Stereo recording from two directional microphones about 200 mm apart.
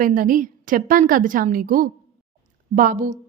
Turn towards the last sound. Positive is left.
turn(degrees=-40)  # may be behind; listen again after turning